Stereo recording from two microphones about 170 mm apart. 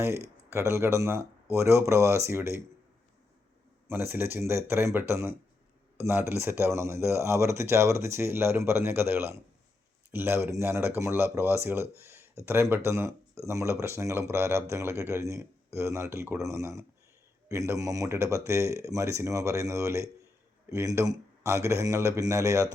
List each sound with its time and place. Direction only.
0.5 s speech: 15° right (ahead or behind)
3.8 s speech: 15° right (ahead or behind)